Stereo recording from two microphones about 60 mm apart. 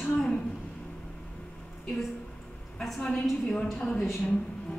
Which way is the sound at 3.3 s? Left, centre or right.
Centre.